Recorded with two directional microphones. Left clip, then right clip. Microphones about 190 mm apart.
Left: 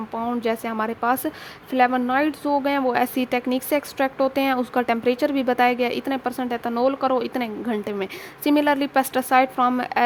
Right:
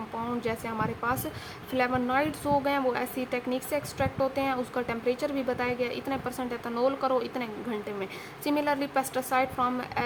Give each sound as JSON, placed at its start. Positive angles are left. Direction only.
{"t": 0.2, "sound": "speech", "side_deg": 45}